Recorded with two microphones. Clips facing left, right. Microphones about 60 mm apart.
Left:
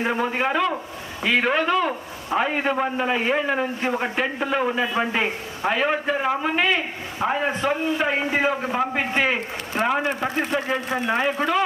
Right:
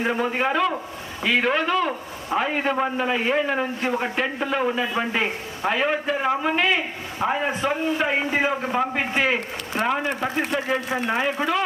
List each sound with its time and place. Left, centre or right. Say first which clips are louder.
0.0 s a man's voice: even; centre
9.7 s speech: left 1 dB; left
10.3 s a man's voice: even; centre